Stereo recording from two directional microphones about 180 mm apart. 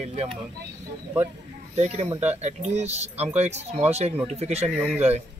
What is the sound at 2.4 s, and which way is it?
Speech, 40° right (ahead or behind).